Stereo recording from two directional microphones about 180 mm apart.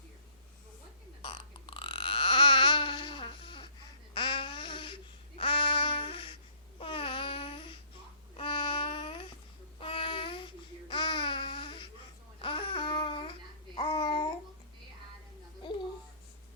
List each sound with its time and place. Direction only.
1.2 s burping: 30° left (ahead or behind)
4.1 s babbling: 25° left (ahead or behind)
5.4 s child singing: 30° left (ahead or behind)
6.7 s babbling: 30° left (ahead or behind)
8.4 s child singing: 25° left (ahead or behind)
9.8 s babbling: 30° left (ahead or behind)
13.7 s child singing: 25° left (ahead or behind)
15.6 s babbling: 25° left (ahead or behind)